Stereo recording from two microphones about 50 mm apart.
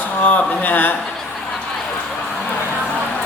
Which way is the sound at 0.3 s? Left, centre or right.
Left.